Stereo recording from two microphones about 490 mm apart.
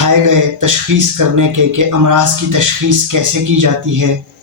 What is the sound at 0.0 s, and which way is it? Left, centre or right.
Speech, right.